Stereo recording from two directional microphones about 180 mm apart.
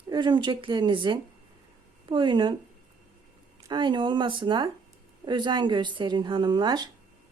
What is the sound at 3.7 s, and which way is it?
Speech, 25° right (ahead or behind).